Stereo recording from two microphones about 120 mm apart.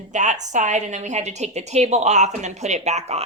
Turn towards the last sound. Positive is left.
turn(degrees=-70)  # may be behind; listen again after turning